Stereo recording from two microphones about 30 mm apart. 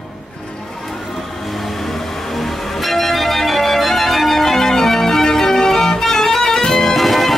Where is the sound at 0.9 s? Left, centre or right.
Centre.